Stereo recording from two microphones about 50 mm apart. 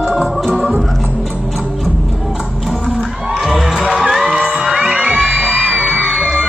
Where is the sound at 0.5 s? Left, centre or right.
Centre.